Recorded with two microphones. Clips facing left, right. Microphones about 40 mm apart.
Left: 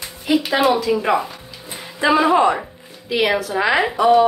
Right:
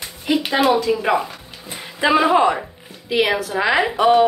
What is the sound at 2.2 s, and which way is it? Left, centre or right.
A woman's voice, centre.